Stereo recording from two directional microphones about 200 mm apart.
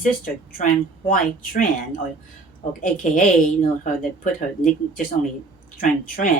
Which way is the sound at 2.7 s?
40° left (ahead or behind).